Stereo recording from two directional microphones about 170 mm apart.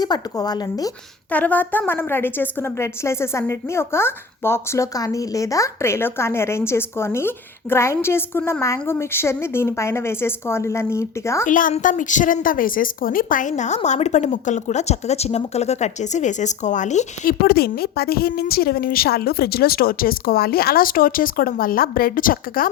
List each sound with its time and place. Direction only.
0.0 s speech: 25° left (ahead or behind)
1.3 s a woman's voice: 10° left (ahead or behind)
11.4 s a woman's voice: 50° left (ahead or behind)
17.4 s a woman's voice: 65° left (ahead or behind)